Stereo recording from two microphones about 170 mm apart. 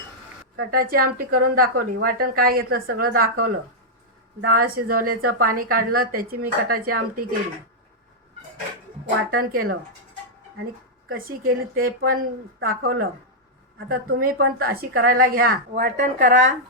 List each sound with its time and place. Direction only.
0.7 s a woman's voice: 60° right (ahead or behind)
4.4 s a woman's voice: 60° right (ahead or behind)
9.4 s a woman's voice: 60° right (ahead or behind)
11.3 s a woman's voice: 60° right (ahead or behind)